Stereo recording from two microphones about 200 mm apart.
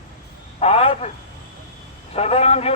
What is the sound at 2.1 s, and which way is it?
Speech, 30° left (ahead or behind).